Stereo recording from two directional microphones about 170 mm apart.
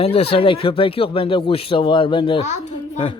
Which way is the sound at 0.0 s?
35° left (ahead or behind).